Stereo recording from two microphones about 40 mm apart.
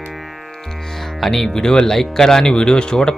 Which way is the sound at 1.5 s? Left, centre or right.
Centre.